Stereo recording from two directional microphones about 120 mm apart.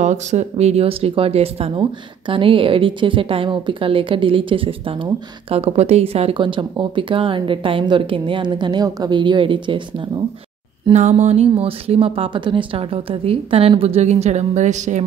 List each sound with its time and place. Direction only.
0.0 s speech: 75° right (ahead or behind); by 5.6 s 45° right (ahead or behind)
5.6 s speech: 60° right (ahead or behind); by 10.2 s 45° right (ahead or behind)
10.9 s speech: 75° right (ahead or behind)